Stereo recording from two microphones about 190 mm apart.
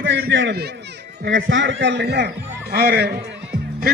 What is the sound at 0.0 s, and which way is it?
Speech, 70° right (ahead or behind).